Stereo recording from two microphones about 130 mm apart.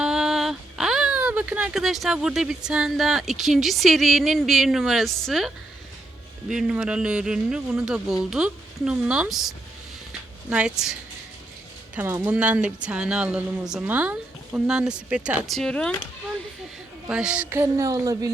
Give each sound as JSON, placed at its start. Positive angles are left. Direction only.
{"t": 0.0, "sound": "speech", "side_deg": -5}
{"t": 6.5, "sound": "speech", "side_deg": -5}
{"t": 10.1, "sound": "a sound", "side_deg": -5}
{"t": 11.9, "sound": "speech", "side_deg": -15}
{"t": 15.4, "sound": "speech", "side_deg": 5}
{"t": 17.1, "sound": "a sound", "side_deg": -10}